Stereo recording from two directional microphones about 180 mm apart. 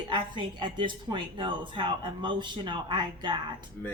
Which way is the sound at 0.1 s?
25° right (ahead or behind).